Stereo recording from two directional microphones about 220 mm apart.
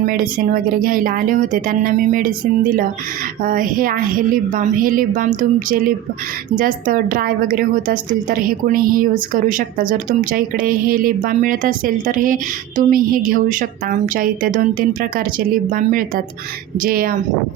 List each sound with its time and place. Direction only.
0.0 s a woman's voice: 40° right (ahead or behind)